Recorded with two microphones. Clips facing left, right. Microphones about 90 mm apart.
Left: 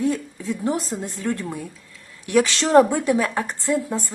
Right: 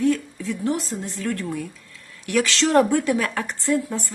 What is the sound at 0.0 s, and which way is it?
A woman's voice, 20° left (ahead or behind).